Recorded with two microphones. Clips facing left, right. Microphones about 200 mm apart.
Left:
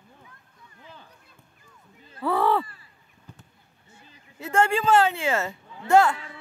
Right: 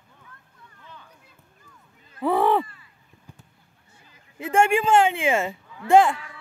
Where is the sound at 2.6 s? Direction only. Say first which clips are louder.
Even; 35° left (ahead or behind).